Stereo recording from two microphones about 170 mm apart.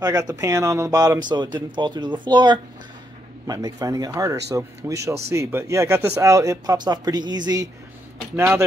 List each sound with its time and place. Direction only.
0.0 s speech: 20° right (ahead or behind)